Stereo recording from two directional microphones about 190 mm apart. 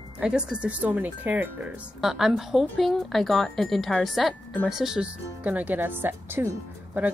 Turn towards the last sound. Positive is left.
turn(degrees=-10)  # may be behind; listen again after turning